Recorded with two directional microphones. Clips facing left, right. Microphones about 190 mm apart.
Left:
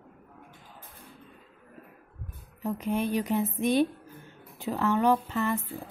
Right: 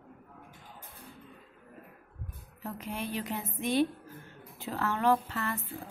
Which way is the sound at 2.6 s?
20° left (ahead or behind).